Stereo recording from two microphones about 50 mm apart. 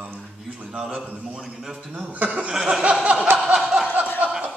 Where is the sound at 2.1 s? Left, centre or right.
Right.